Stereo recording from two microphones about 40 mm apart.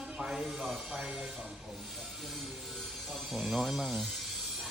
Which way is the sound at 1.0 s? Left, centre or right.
Centre.